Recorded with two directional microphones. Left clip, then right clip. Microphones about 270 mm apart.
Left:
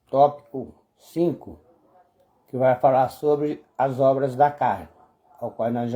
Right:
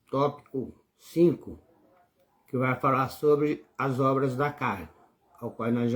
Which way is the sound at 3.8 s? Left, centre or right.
Left.